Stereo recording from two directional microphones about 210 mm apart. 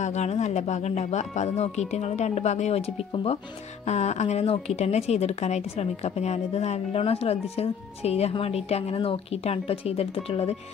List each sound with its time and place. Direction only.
0.0 s speech: 35° left (ahead or behind)